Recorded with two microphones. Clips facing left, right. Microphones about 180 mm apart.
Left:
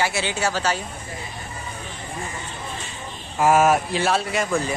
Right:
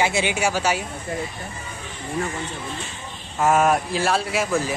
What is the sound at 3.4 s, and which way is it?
Speech, 5° left (ahead or behind).